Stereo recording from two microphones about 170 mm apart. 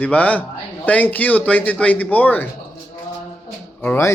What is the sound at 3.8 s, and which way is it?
Speech, 10° left (ahead or behind).